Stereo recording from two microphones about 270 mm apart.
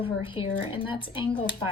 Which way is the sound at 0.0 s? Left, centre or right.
Centre.